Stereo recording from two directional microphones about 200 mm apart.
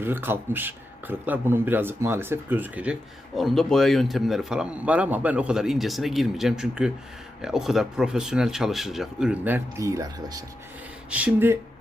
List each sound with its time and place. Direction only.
0.0 s a man's voice: 10° right (ahead or behind)
11.1 s speech: 5° right (ahead or behind)